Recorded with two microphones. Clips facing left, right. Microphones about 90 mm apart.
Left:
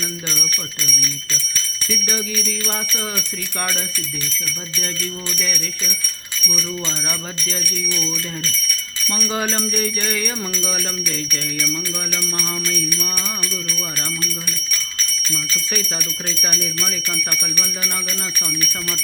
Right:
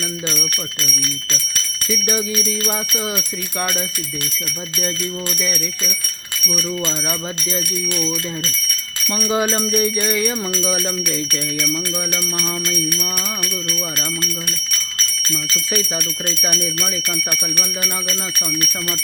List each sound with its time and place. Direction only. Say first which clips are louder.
0.8 s speech: right 2 dB; 75° right (ahead or behind)
1.9 s jingle bell: right 4 dB; 20° right (ahead or behind)
6.5 s jingle bell: right 4 dB; 20° right (ahead or behind)
9.1 s music: right 4 dB; 20° right (ahead or behind)